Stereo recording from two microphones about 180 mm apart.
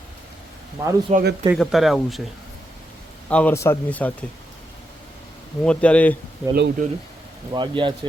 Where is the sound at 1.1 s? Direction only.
40° right (ahead or behind).